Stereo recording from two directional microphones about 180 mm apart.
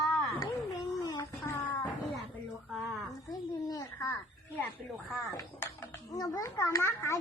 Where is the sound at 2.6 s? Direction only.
Centre (ahead or behind).